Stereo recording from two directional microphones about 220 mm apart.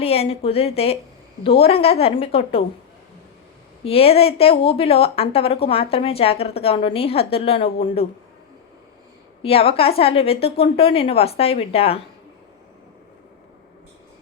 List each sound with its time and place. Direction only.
0.0 s speech: 25° left (ahead or behind)
3.8 s speech: 25° left (ahead or behind)
9.4 s speech: 25° left (ahead or behind)